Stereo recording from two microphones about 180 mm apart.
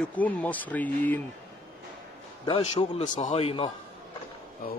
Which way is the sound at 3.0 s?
45° left (ahead or behind).